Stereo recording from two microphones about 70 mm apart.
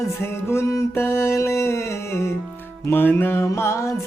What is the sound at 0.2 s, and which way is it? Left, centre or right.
Music, left.